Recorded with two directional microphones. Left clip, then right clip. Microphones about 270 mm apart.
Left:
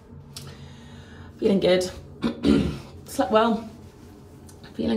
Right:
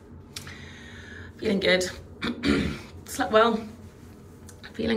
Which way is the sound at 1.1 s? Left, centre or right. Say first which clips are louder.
Left 5 dB; left.